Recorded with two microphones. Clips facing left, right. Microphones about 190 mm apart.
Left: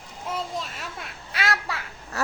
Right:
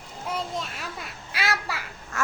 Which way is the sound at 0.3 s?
Centre (ahead or behind).